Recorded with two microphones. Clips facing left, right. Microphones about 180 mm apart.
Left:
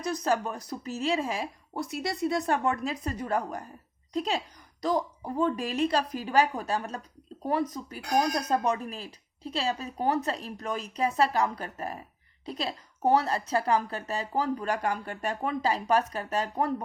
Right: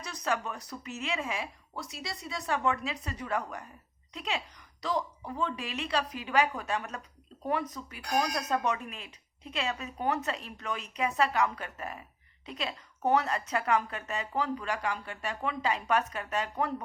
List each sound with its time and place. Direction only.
0.3 s a woman's voice: 35° left (ahead or behind)
1.7 s a woman's voice: 55° left (ahead or behind); by 16.7 s 40° left (ahead or behind)